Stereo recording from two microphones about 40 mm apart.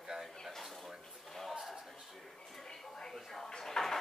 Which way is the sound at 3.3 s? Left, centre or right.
Centre.